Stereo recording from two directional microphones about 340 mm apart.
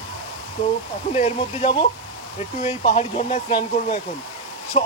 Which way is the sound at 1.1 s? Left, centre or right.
Centre.